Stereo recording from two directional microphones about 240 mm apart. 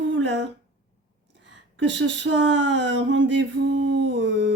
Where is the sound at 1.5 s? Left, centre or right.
Right.